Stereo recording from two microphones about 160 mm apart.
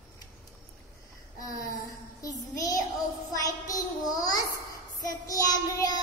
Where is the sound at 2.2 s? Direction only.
20° left (ahead or behind).